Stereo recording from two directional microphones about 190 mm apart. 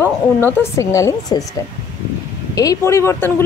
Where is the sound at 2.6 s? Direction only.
15° left (ahead or behind).